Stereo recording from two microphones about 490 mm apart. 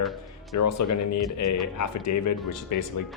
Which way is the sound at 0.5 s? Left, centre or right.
Left.